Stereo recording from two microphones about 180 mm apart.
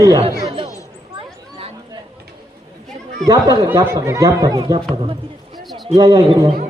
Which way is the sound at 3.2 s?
20° right (ahead or behind).